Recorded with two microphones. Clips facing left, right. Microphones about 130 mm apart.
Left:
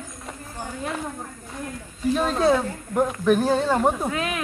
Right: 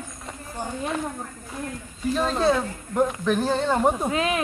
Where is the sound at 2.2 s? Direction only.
5° left (ahead or behind).